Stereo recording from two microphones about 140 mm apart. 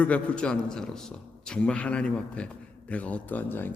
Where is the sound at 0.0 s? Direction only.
10° left (ahead or behind).